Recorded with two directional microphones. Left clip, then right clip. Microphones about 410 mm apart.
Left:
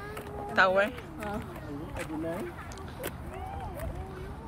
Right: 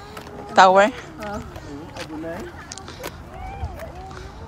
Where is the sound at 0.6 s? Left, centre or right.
Centre.